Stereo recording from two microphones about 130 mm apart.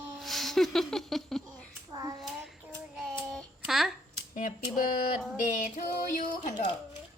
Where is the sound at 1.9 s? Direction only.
30° right (ahead or behind).